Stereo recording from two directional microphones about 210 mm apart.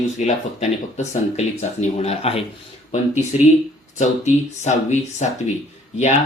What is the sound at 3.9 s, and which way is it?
Speech, 35° left (ahead or behind).